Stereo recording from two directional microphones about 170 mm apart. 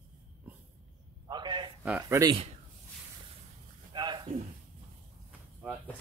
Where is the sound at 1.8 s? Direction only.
10° right (ahead or behind).